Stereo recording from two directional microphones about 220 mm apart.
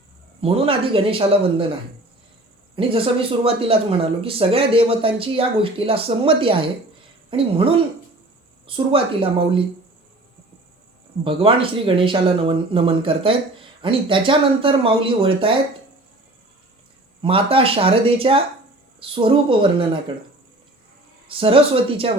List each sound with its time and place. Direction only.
0.4 s speech: 25° right (ahead or behind)
2.7 s a woman's voice: 25° right (ahead or behind)
11.2 s speech: 25° right (ahead or behind)
17.2 s speech: 25° right (ahead or behind)
21.2 s speech: 25° right (ahead or behind)